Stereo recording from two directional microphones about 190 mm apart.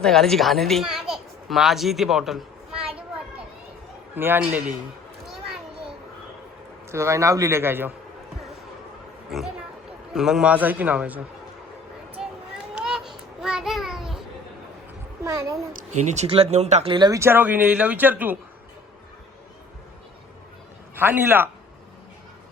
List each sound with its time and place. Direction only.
0.0 s a woman's voice: centre (ahead or behind)
4.1 s speech: 10° right (ahead or behind)
6.9 s speech: 15° right (ahead or behind)
10.2 s speech: centre (ahead or behind)
12.2 s a sound: centre (ahead or behind)
15.2 s a sound: 15° right (ahead or behind)
15.7 s speech: 40° right (ahead or behind)
16.9 s speech: 20° right (ahead or behind)
20.9 s speech: 10° right (ahead or behind)